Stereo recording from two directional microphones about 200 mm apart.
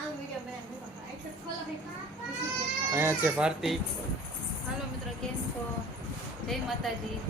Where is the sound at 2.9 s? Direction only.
10° right (ahead or behind).